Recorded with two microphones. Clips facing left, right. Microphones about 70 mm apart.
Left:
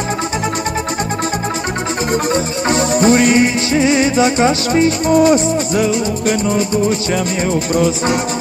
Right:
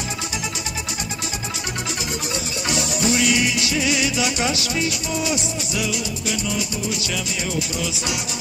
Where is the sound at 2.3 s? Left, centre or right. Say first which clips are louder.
Left 10 dB; left.